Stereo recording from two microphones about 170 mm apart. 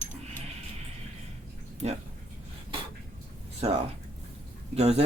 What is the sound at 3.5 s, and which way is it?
Speech, 40° right (ahead or behind).